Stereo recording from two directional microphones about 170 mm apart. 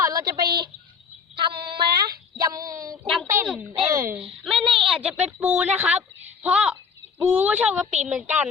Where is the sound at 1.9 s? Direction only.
25° right (ahead or behind).